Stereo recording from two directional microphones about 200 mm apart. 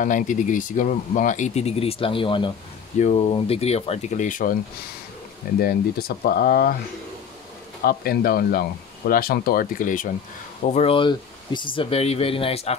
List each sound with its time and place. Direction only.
0.0 s speech: 40° left (ahead or behind)
5.6 s speech: 50° left (ahead or behind)
7.8 s speech: 50° left (ahead or behind)
10.7 s speech: 30° left (ahead or behind)